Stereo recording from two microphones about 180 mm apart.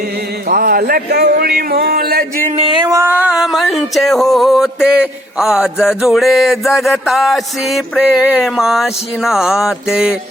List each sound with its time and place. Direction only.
0.4 s a man's voice: 55° right (ahead or behind)
2.6 s music: 25° right (ahead or behind); by 10.2 s 5° right (ahead or behind)